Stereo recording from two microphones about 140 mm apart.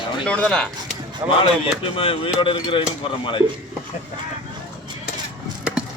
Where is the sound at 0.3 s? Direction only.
5° left (ahead or behind).